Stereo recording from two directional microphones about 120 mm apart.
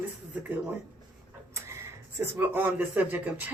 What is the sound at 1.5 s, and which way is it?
Printer, 25° right (ahead or behind).